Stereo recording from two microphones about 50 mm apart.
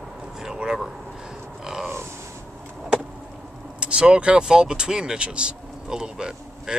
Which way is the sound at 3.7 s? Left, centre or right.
Right.